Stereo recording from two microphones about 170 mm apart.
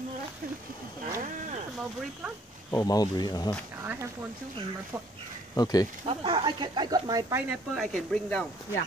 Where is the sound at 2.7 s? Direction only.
20° left (ahead or behind).